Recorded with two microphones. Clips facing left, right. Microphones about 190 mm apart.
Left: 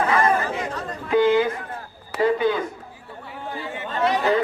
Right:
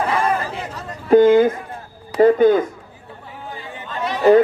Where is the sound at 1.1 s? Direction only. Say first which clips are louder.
Right 7 dB; 45° right (ahead or behind).